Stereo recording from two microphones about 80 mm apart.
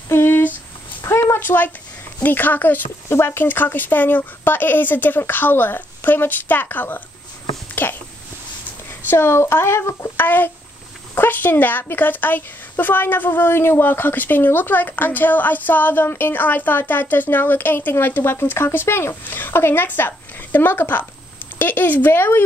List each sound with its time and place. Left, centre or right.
0.1 s a sound: left
2.2 s a woman's voice: left
9.1 s a child's voice: left